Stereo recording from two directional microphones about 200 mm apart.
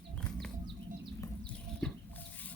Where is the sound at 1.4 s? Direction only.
5° left (ahead or behind).